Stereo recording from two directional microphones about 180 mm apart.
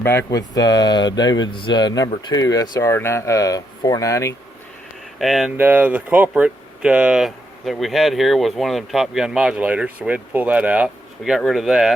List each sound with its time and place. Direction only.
0.0 s speech: 15° left (ahead or behind)
5.2 s speech: centre (ahead or behind)